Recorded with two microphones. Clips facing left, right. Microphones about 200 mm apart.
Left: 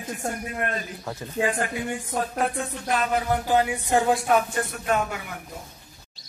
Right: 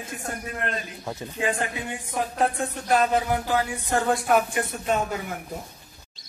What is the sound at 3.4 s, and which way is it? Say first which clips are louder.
Music: left 3 dB; 20° left (ahead or behind).